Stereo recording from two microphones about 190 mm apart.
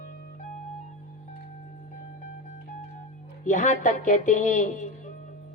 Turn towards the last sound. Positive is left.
turn(degrees=40)  # may be behind; listen again after turning